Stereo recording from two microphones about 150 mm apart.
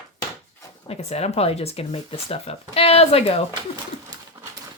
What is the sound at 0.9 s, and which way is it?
A woman's voice, 45° left (ahead or behind).